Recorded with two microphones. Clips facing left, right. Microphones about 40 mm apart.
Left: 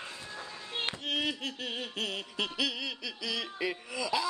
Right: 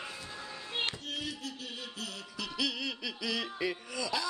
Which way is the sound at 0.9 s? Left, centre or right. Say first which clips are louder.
Left 5 dB; left.